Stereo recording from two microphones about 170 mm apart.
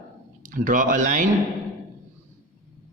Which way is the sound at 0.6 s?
50° right (ahead or behind).